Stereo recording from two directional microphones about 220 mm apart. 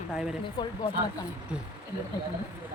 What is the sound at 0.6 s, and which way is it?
Speech, 20° left (ahead or behind).